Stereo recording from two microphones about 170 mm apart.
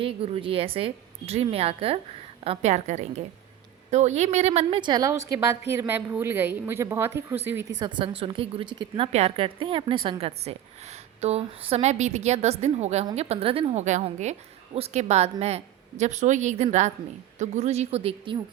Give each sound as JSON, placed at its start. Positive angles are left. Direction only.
{"t": 0.0, "sound": "a woman's voice", "side_deg": -35}
{"t": 4.8, "sound": "a woman's voice", "side_deg": -25}
{"t": 7.8, "sound": "a woman's voice", "side_deg": -30}